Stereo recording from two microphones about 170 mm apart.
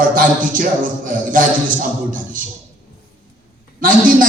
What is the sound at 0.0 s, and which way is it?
A man's voice, 55° right (ahead or behind).